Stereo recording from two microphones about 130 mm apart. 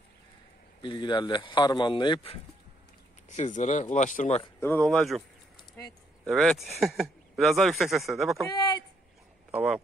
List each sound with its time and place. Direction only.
0.8 s a man's voice: 35° left (ahead or behind)
3.3 s speech: 70° left (ahead or behind)
4.6 s speech: 15° left (ahead or behind)
6.2 s speech: centre (ahead or behind)
8.5 s a sound: 30° left (ahead or behind)
9.5 s speech: 10° right (ahead or behind)